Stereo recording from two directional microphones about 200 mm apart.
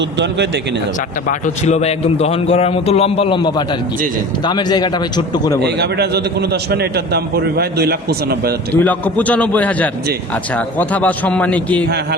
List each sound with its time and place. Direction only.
0.2 s speech: 60° right (ahead or behind)
1.3 s a man's voice: 35° left (ahead or behind)
5.6 s a man's voice: 55° right (ahead or behind)
8.7 s a man's voice: 10° left (ahead or behind)